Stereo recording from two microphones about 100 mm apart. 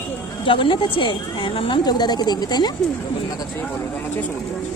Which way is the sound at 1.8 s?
45° left (ahead or behind).